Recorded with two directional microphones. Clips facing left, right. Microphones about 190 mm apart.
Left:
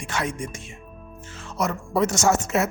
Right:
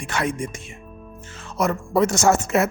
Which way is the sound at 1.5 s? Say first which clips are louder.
Right 3 dB; 55° right (ahead or behind).